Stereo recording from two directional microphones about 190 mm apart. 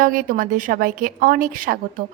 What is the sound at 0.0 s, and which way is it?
A woman's voice, 45° right (ahead or behind).